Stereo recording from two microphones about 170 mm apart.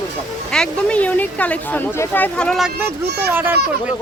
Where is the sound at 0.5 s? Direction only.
5° left (ahead or behind).